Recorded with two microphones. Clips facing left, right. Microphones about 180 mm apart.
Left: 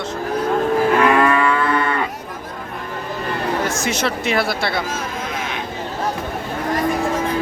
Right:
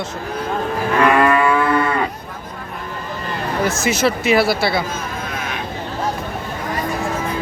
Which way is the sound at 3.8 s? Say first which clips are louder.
Right 3 dB; 5° right (ahead or behind).